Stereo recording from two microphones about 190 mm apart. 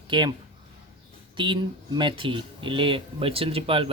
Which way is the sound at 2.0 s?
25° right (ahead or behind).